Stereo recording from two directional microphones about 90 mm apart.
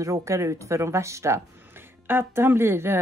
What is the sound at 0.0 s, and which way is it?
Speech, 35° right (ahead or behind).